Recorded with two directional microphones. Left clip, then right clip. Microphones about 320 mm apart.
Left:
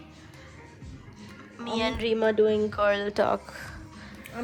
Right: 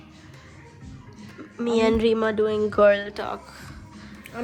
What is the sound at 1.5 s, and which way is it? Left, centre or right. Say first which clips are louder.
A woman's voice: right 8 dB; centre.